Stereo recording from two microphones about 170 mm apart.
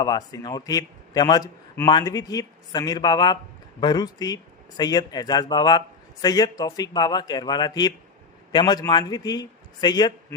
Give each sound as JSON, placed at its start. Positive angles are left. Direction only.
{"t": 0.0, "sound": "a man's voice", "side_deg": 20}